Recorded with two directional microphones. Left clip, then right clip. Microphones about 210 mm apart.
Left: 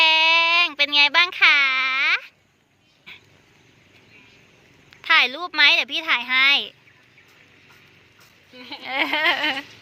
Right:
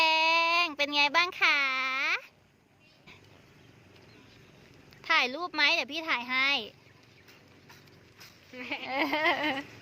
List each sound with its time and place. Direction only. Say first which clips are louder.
0.0 s a sound: left 8 dB; 5° right (ahead or behind)
4.9 s a woman's voice: left 9 dB; centre (ahead or behind)
8.8 s speech: left 8 dB; 5° right (ahead or behind)